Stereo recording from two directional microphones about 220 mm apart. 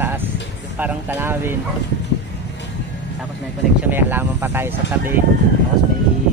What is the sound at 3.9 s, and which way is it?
Speech, 10° right (ahead or behind).